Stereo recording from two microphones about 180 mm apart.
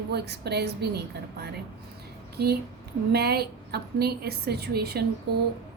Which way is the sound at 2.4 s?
60° right (ahead or behind).